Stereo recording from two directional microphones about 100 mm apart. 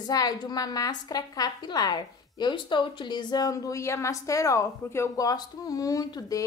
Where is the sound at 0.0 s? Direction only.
40° left (ahead or behind).